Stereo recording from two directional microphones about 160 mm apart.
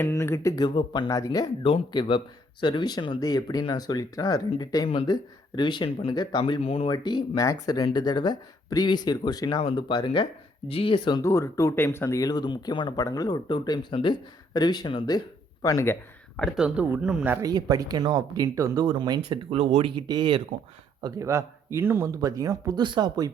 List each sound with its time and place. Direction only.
0.0 s speech: 20° left (ahead or behind)
9.5 s speech: 35° left (ahead or behind)
15.6 s speech: 15° left (ahead or behind)
16.4 s speech: centre (ahead or behind)
17.4 s speech: 25° right (ahead or behind); by 19.9 s 40° right (ahead or behind)
20.0 s speech: 30° right (ahead or behind)
21.0 s speech: 20° right (ahead or behind)